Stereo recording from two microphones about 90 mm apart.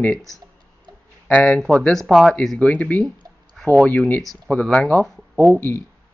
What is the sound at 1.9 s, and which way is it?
Speech, centre (ahead or behind).